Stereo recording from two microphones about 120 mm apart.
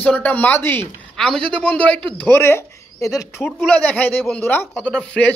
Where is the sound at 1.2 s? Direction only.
5° left (ahead or behind).